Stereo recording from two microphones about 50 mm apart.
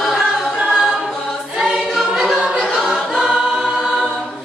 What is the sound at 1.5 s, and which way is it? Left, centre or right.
Choir, centre.